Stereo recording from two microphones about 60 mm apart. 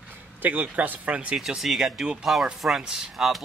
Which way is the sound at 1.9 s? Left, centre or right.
Centre.